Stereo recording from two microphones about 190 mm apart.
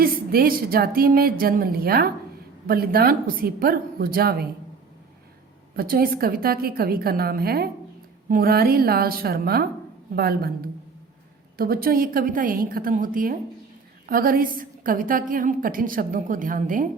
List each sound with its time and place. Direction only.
0.0 s a woman's voice: 50° right (ahead or behind)
5.7 s a woman's voice: 50° right (ahead or behind)
11.5 s a woman's voice: 50° right (ahead or behind)